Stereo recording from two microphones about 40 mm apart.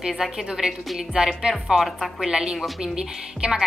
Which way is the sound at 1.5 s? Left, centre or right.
Centre.